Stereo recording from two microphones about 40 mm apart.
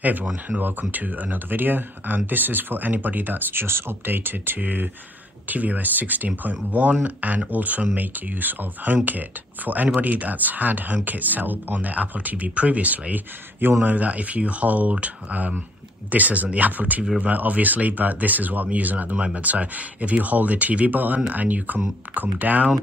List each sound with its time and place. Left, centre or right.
0.0 s speech: right
3.6 s speech: right
4.6 s speech: right
19.1 s speech: right
19.4 s speech: right